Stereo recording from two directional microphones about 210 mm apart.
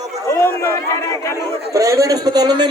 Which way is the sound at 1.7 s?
15° right (ahead or behind).